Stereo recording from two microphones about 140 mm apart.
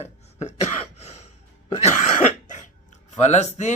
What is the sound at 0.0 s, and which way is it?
Throat clearing, 50° left (ahead or behind).